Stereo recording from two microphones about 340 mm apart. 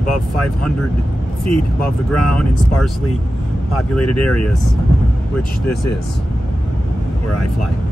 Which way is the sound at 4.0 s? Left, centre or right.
Left.